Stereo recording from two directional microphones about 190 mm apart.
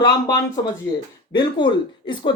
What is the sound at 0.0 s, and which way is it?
Speech, 20° left (ahead or behind).